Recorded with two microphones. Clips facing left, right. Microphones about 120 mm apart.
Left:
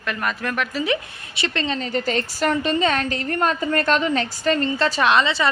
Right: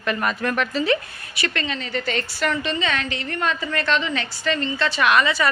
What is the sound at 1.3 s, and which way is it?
A woman's voice, 25° left (ahead or behind).